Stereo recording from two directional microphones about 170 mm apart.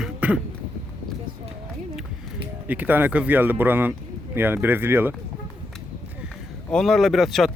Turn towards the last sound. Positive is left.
turn(degrees=0)  # may be behind; listen again after turning